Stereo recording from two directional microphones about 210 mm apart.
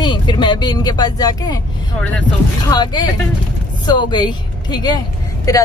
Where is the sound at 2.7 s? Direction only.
20° left (ahead or behind).